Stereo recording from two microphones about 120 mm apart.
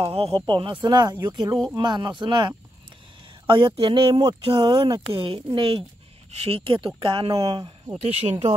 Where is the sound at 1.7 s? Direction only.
40° right (ahead or behind).